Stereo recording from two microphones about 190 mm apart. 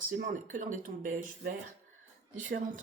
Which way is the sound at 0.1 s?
45° right (ahead or behind).